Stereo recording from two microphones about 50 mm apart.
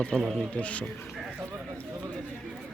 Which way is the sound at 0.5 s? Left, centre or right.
Left.